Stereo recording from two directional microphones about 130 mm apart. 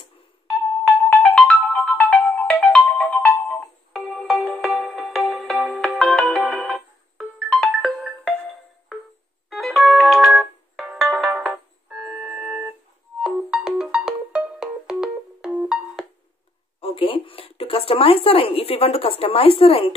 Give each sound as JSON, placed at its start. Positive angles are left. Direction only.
{"t": 1.1, "sound": "ringtone", "side_deg": 5}
{"t": 4.3, "sound": "music", "side_deg": 0}
{"t": 9.5, "sound": "ringtone", "side_deg": 0}
{"t": 13.2, "sound": "music", "side_deg": -5}
{"t": 16.8, "sound": "a sound", "side_deg": 45}